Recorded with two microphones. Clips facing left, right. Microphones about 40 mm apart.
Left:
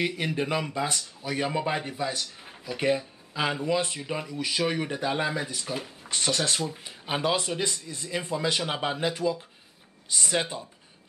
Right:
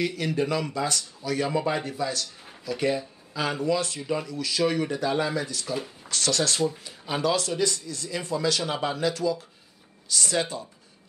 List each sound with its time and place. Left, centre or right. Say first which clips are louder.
0.0 s speech: right 2 dB; left
2.6 s speech: even; left